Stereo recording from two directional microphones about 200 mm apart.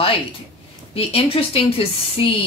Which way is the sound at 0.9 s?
30° left (ahead or behind).